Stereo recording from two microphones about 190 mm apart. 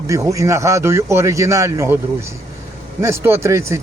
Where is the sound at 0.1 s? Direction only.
15° right (ahead or behind).